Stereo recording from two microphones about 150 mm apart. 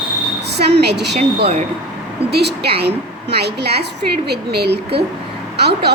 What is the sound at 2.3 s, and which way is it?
Speech, 90° right.